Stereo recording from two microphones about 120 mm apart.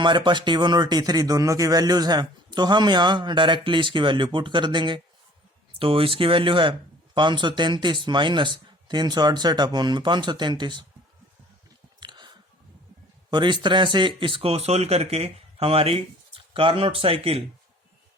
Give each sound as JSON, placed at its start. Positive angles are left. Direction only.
{"t": 0.0, "sound": "speech", "side_deg": -40}
{"t": 11.9, "sound": "chewing", "side_deg": -40}
{"t": 13.3, "sound": "speech", "side_deg": -40}